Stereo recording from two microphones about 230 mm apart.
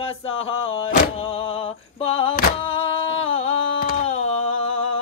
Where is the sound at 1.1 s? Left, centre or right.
Left.